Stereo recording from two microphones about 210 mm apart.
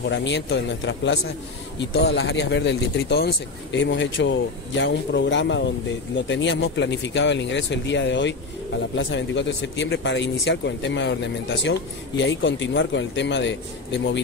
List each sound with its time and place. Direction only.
0.1 s speech: 55° left (ahead or behind)